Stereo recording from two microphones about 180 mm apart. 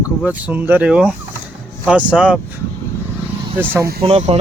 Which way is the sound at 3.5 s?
10° right (ahead or behind).